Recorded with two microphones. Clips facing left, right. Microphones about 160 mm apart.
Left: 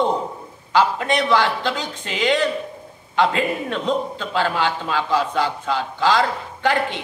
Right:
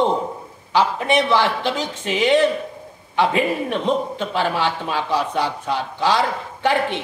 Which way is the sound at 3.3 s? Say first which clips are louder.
Right 2 dB; 20° right (ahead or behind).